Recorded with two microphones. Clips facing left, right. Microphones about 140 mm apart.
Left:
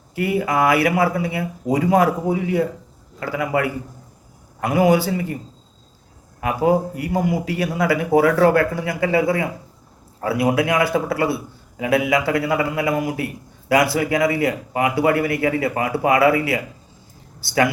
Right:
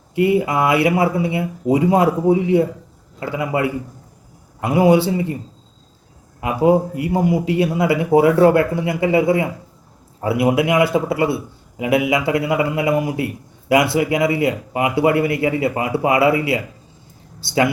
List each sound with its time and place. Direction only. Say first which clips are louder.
0.1 s a man's voice: right 4 dB; 25° right (ahead or behind)
6.4 s a man's voice: right 3 dB; 20° right (ahead or behind)